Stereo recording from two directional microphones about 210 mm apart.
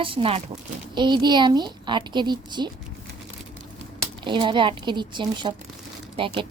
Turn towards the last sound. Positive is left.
turn(degrees=-25)  # may be behind; listen again after turning